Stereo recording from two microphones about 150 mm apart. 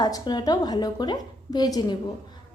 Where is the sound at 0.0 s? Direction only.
30° left (ahead or behind).